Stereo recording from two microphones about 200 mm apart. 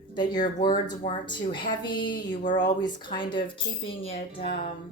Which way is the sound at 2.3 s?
40° left (ahead or behind).